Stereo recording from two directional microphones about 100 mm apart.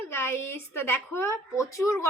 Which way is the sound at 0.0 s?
20° left (ahead or behind).